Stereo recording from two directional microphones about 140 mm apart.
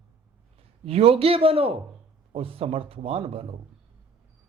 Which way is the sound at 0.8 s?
45° right (ahead or behind).